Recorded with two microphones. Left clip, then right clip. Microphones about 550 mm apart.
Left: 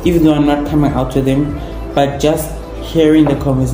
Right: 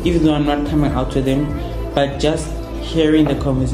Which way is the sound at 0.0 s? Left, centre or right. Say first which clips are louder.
Left 5 dB; right.